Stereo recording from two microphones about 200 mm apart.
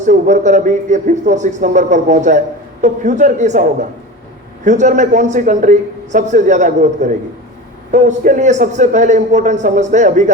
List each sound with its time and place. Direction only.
0.0 s a man's voice: 35° right (ahead or behind)
4.6 s a man's voice: 35° right (ahead or behind)